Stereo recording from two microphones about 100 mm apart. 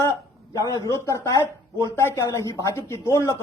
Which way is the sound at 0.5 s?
35° left (ahead or behind).